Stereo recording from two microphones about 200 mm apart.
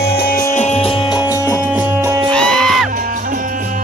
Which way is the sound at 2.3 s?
5° left (ahead or behind).